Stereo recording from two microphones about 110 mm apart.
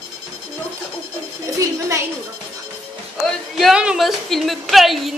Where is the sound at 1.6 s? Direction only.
25° right (ahead or behind).